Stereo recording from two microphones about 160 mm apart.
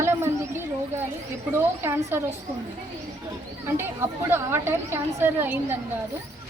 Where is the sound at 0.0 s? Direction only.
15° right (ahead or behind).